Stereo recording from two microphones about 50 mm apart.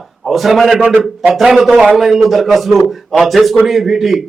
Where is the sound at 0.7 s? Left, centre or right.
Right.